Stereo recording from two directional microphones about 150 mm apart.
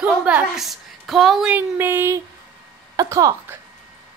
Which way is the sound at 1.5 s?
15° right (ahead or behind).